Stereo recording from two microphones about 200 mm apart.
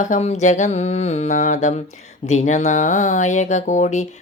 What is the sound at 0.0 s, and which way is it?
A woman's voice, 35° left (ahead or behind).